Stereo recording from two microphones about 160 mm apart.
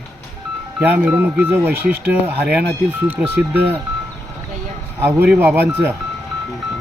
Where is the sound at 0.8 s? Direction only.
10° right (ahead or behind).